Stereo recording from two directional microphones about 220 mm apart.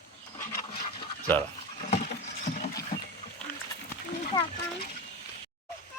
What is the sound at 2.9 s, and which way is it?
Wild animals, 45° left (ahead or behind).